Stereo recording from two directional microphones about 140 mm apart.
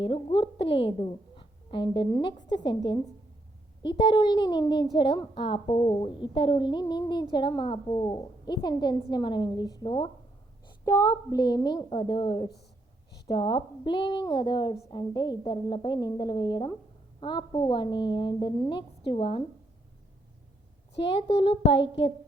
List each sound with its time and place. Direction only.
0.0 s a woman's voice: 40° left (ahead or behind)
21.1 s a child's voice: 40° left (ahead or behind)